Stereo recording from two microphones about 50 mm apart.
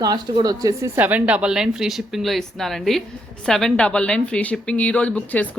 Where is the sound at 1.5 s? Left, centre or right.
Centre.